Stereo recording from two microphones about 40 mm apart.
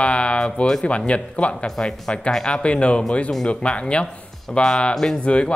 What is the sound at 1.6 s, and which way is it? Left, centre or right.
Speech, centre.